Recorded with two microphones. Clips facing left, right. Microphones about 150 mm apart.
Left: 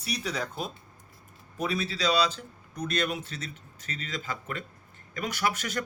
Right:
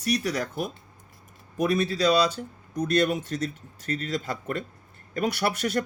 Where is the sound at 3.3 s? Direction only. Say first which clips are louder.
Right 10 dB; 45° right (ahead or behind).